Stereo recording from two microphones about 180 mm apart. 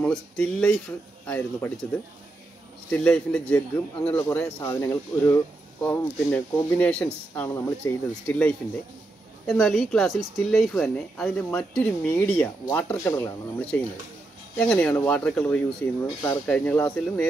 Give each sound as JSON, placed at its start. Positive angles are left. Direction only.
{"t": 0.0, "sound": "speech", "side_deg": 5}
{"t": 2.9, "sound": "a man's voice", "side_deg": 5}